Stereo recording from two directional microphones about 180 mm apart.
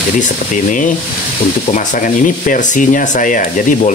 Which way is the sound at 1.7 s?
45° left (ahead or behind).